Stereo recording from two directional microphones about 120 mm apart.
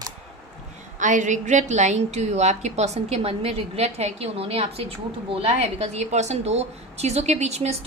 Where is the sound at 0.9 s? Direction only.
90° right.